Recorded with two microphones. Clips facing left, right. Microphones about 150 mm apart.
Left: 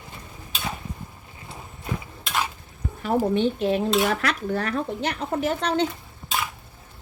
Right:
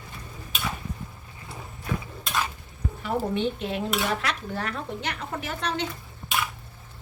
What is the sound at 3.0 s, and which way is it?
Speech, 40° left (ahead or behind).